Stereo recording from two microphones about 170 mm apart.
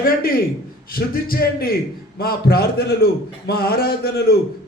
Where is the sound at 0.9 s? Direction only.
60° left (ahead or behind).